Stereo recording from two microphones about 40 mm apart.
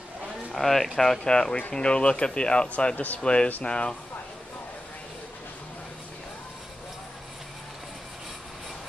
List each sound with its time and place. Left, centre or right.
0.5 s speech: centre
1.2 s speech: left